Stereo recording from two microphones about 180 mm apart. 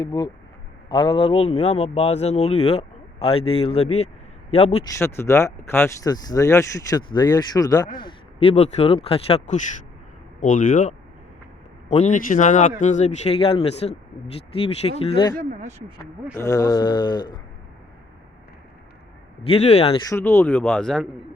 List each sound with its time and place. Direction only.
0.0 s a man's voice: 25° left (ahead or behind)
4.9 s a man's voice: 15° left (ahead or behind); by 9.6 s 35° left (ahead or behind)
10.4 s a man's voice: 45° left (ahead or behind); by 17.3 s 25° left (ahead or behind)
19.5 s a man's voice: 35° left (ahead or behind)
20.1 s speech: 15° left (ahead or behind)